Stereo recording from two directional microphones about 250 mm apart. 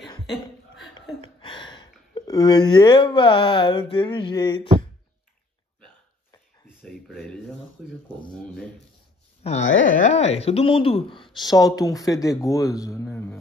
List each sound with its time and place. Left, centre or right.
1.2 s speech: centre
6.8 s speech: centre
9.4 s speech: left; by 13.4 s centre